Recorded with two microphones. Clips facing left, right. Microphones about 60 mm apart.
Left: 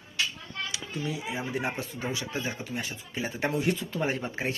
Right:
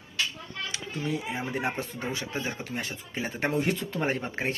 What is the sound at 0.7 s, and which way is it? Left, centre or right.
Speech, right.